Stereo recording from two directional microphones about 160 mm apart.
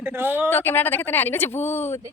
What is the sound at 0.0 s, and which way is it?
Speech, 15° right (ahead or behind).